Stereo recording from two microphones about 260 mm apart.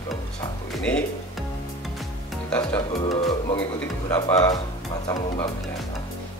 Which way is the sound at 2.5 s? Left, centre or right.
Centre.